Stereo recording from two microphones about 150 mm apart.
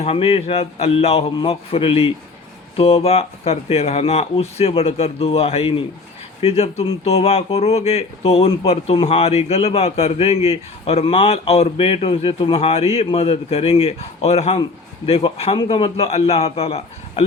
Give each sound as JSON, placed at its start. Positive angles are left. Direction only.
{"t": 0.0, "sound": "a man's voice", "side_deg": 40}